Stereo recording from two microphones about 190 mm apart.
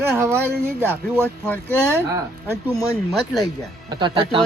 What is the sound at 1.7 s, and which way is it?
Speech, 10° right (ahead or behind).